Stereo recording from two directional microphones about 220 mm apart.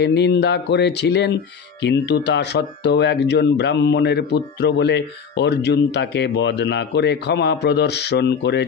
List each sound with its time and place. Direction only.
0.0 s speech: 50° left (ahead or behind)